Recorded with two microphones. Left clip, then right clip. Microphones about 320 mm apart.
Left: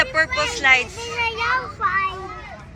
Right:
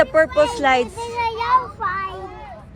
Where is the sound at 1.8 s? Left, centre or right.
Right.